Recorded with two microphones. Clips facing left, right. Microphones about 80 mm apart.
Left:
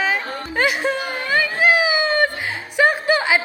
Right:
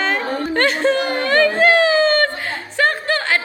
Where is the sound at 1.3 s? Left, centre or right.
Centre.